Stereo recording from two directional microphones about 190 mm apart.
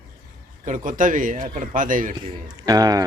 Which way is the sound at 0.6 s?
40° right (ahead or behind).